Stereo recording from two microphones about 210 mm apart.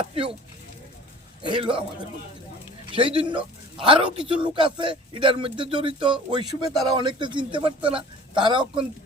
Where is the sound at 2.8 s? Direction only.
25° right (ahead or behind).